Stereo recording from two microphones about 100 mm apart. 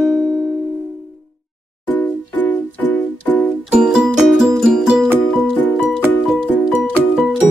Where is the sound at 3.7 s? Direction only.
10° right (ahead or behind).